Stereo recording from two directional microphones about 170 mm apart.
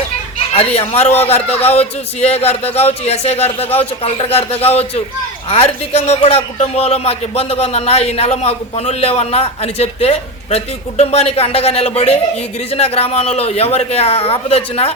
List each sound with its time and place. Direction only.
0.5 s a man's voice: 35° left (ahead or behind)